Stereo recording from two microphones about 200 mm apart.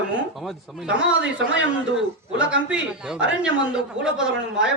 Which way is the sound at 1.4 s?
70° right (ahead or behind).